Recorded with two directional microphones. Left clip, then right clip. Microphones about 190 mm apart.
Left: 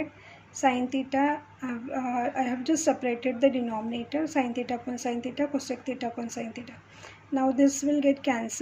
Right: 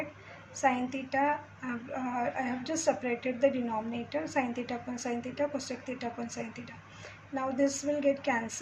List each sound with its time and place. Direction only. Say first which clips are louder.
0.5 s a woman's voice: left 4 dB; 45° left (ahead or behind)